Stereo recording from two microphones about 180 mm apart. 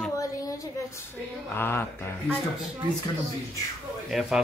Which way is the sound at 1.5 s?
10° left (ahead or behind).